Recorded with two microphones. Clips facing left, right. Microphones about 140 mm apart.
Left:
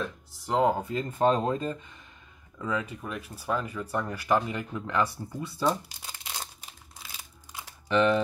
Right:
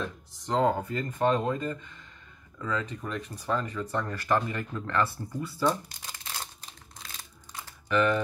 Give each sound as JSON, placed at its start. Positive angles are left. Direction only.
{"t": 0.0, "sound": "speech", "side_deg": 5}
{"t": 7.9, "sound": "speech", "side_deg": 20}